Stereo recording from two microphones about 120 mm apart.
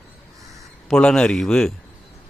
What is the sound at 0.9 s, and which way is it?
Speech, 5° left (ahead or behind).